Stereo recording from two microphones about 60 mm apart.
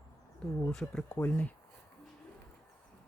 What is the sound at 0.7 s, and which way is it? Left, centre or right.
Speech, centre.